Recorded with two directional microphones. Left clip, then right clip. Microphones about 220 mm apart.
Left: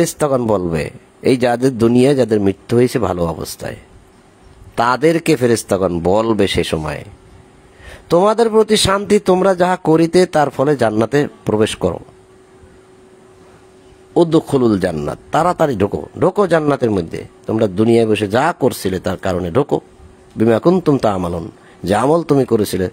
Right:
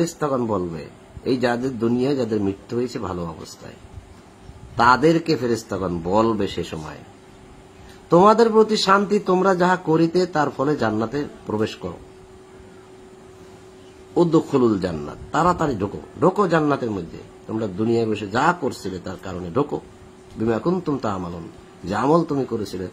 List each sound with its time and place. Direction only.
0.0 s speech: 45° left (ahead or behind)
4.7 s speech: 50° left (ahead or behind)
8.1 s speech: 45° left (ahead or behind)
14.1 s speech: 45° left (ahead or behind)